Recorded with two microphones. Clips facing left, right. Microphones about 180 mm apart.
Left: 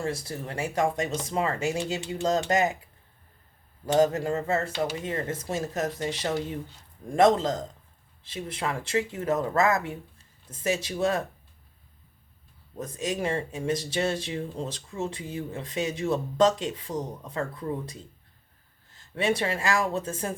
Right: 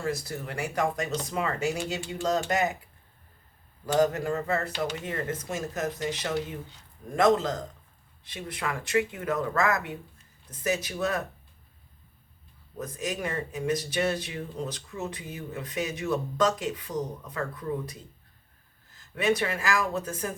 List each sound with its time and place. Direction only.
0.0 s speech: 30° left (ahead or behind)
3.8 s speech: 25° left (ahead or behind)
12.8 s speech: 25° left (ahead or behind)